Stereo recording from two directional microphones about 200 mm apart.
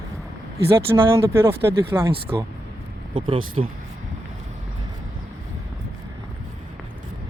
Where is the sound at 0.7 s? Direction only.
15° right (ahead or behind).